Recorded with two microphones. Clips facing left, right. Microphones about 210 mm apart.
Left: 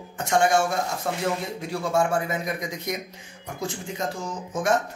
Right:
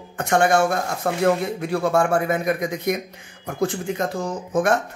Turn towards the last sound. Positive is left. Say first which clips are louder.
# right 5 dB
turn(degrees=-60)  # may be behind; listen again after turning